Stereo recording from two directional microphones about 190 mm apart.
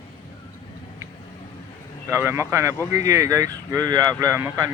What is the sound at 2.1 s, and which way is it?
Speech, 15° right (ahead or behind).